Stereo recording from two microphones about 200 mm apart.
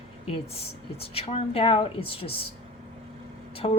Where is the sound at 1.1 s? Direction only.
30° left (ahead or behind).